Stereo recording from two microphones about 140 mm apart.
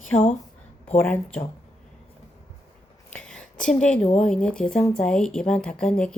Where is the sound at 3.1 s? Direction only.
10° left (ahead or behind).